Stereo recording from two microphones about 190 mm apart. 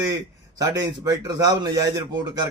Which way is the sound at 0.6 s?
20° right (ahead or behind).